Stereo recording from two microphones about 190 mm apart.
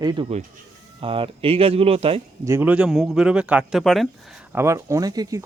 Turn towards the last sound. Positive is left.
turn(degrees=-20)  # may be behind; listen again after turning